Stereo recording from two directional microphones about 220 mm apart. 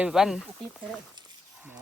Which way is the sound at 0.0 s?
Centre (ahead or behind).